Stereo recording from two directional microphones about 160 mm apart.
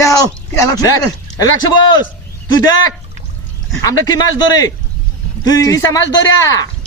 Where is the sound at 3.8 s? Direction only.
25° left (ahead or behind).